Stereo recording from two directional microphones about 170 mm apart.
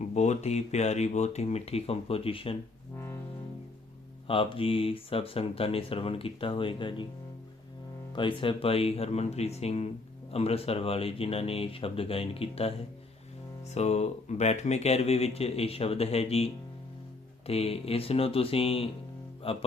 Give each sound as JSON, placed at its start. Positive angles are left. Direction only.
{"t": 0.0, "sound": "speech", "side_deg": 45}
{"t": 4.3, "sound": "speech", "side_deg": 30}
{"t": 8.1, "sound": "speech", "side_deg": 30}
{"t": 13.7, "sound": "speech", "side_deg": 40}